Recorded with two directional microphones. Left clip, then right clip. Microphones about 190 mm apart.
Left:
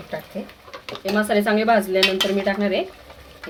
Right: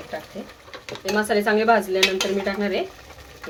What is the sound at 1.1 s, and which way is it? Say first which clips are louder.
Speech: left 1 dB; 25° left (ahead or behind).